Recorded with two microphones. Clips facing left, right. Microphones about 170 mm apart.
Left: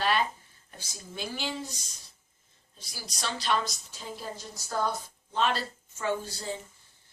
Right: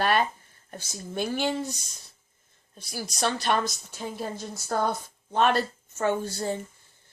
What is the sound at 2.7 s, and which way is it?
A woman's voice, 55° right (ahead or behind).